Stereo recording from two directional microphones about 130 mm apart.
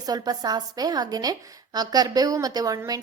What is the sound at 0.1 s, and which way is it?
A woman's voice, 30° right (ahead or behind).